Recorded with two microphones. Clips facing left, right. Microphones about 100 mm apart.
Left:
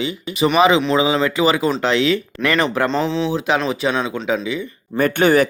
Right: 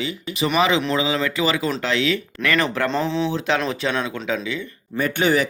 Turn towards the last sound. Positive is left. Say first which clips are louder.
# left 5 dB
turn(degrees=50)  # may be behind; listen again after turning